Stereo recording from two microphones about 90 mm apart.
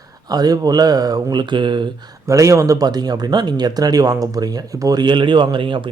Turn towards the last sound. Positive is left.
turn(degrees=-65)  # may be behind; listen again after turning